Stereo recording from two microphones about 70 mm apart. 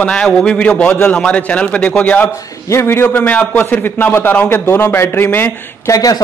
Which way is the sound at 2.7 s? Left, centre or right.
Left.